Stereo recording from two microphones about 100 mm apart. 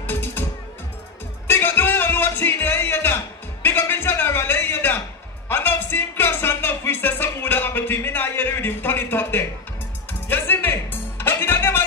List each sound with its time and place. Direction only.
0.0 s music: 20° left (ahead or behind)
1.5 s music: 20° left (ahead or behind)
3.6 s a sound: 20° left (ahead or behind)
5.5 s music: 20° left (ahead or behind)